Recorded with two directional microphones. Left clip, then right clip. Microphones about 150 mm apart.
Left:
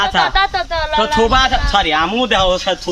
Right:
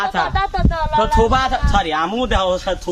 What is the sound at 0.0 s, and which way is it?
Speech, 25° left (ahead or behind).